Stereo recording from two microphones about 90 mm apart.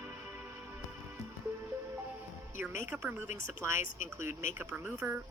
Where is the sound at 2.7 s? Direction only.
25° right (ahead or behind).